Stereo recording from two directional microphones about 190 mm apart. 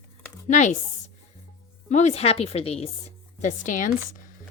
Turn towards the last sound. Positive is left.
turn(degrees=40)  # may be behind; listen again after turning